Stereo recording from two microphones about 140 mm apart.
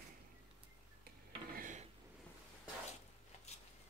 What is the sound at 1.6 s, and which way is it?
Dishes, 65° right (ahead or behind).